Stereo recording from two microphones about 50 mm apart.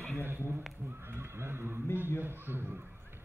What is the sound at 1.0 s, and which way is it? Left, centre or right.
Neigh, right.